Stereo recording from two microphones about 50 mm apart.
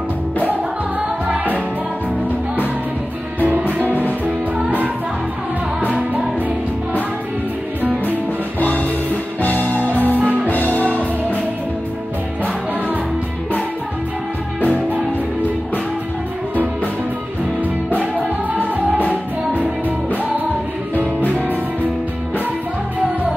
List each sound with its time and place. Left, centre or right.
3.3 s music: right
3.8 s music: left
4.6 s music: right
8.5 s music: left
9.8 s music: right
10.5 s music: left